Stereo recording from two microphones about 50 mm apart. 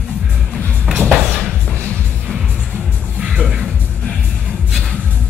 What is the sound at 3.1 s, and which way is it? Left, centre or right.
Music, centre.